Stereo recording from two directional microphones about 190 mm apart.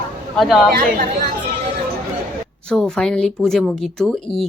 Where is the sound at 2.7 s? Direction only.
5° left (ahead or behind).